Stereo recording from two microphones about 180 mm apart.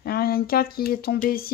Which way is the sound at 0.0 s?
60° left (ahead or behind).